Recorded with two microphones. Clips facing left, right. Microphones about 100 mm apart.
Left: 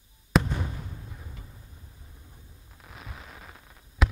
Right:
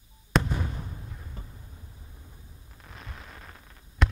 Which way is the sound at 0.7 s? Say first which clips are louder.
Right 1 dB; 20° right (ahead or behind).